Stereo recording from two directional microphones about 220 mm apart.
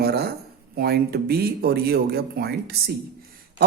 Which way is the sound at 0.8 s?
45° right (ahead or behind).